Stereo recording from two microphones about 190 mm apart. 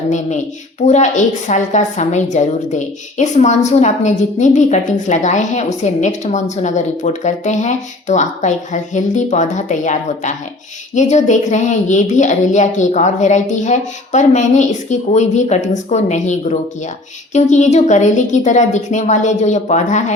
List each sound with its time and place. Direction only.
0.1 s a woman's voice: 40° left (ahead or behind)